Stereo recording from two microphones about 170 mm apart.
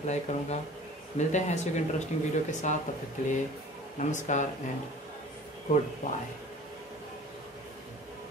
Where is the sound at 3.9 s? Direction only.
45° left (ahead or behind).